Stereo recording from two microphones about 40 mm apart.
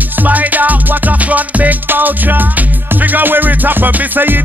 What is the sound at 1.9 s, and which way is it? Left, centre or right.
Music, right.